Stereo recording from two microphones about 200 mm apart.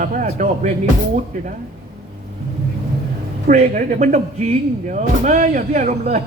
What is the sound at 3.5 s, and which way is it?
Speech, 35° right (ahead or behind).